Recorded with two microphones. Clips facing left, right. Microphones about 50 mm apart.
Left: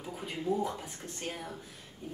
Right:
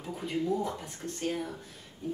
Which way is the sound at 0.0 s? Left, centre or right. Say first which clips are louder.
Right 4 dB; centre.